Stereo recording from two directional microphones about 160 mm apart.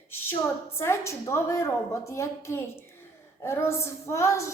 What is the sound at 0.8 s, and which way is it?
A woman's voice, 15° left (ahead or behind).